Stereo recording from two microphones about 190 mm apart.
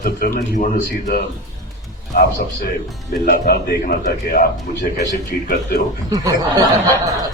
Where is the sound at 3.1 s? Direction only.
55° left (ahead or behind).